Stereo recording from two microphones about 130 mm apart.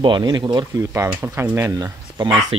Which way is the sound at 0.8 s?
20° right (ahead or behind).